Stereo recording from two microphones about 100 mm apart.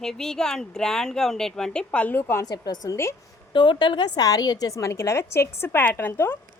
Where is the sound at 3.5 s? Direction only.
55° left (ahead or behind).